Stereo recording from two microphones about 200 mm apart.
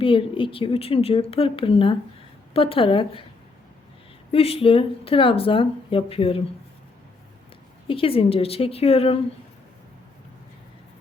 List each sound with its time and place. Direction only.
0.0 s speech: 25° left (ahead or behind)
4.3 s speech: 30° left (ahead or behind)
7.9 s speech: 25° left (ahead or behind)